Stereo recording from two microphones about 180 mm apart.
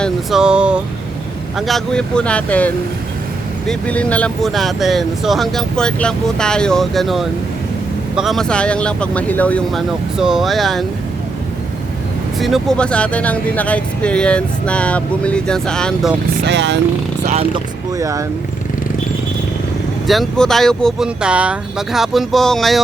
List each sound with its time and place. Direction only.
0.0 s speech: centre (ahead or behind)
12.4 s speech: centre (ahead or behind)
16.5 s speech: 75° right (ahead or behind)
17.9 s speech: 20° right (ahead or behind)
20.1 s speech: centre (ahead or behind)